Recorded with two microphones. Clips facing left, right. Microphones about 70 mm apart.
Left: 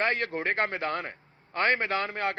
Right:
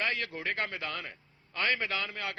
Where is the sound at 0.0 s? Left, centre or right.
Left.